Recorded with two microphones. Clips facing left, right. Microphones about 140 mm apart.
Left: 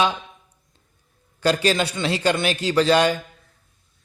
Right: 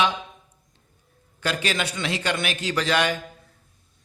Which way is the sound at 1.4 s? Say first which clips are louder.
Left 7 dB; 35° left (ahead or behind).